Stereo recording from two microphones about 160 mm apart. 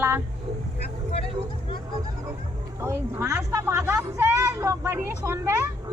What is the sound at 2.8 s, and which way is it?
Speech, 15° right (ahead or behind).